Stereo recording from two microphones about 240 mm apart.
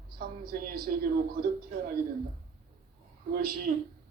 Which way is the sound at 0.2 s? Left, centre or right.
Right.